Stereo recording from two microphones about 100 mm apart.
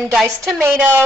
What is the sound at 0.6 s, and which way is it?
Speech, 25° right (ahead or behind).